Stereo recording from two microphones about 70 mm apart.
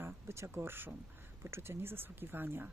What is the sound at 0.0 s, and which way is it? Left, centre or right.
Speech, right.